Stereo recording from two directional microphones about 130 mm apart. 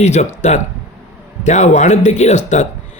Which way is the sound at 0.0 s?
60° left (ahead or behind).